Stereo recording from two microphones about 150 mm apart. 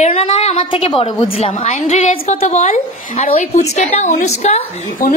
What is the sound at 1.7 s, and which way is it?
A woman's voice, 55° left (ahead or behind).